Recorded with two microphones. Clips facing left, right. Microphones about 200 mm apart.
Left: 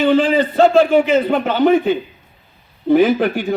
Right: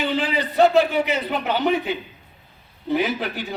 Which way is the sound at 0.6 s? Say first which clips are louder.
Left 4 dB; 50° left (ahead or behind).